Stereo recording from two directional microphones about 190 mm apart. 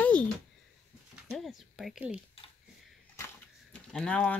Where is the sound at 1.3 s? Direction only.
Centre (ahead or behind).